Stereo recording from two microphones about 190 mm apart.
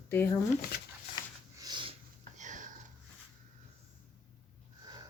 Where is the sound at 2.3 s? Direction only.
40° right (ahead or behind).